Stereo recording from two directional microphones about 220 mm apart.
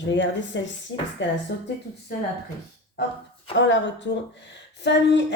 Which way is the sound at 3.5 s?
55° left (ahead or behind).